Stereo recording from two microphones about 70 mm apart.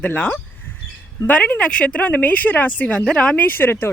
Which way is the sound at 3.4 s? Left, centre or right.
Left.